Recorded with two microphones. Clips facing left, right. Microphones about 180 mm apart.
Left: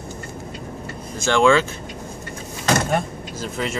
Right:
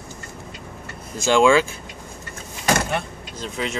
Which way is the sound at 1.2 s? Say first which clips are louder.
Right 1 dB; 10° right (ahead or behind).